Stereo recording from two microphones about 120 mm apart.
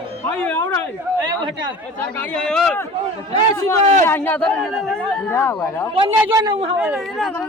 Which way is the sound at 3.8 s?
70° right (ahead or behind).